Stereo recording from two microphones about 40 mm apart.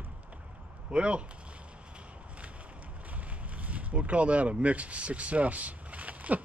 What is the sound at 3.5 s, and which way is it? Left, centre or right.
Speech, right.